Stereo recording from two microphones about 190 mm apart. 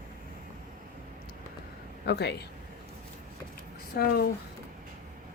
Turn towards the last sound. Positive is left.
turn(degrees=55)  # may be behind; listen again after turning